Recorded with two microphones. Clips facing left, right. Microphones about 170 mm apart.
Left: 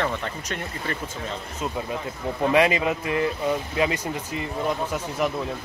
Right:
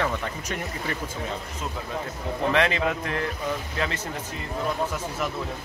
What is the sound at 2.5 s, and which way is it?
Speech, 10° left (ahead or behind).